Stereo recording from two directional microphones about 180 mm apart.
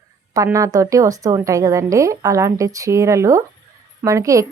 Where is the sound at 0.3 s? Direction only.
15° right (ahead or behind).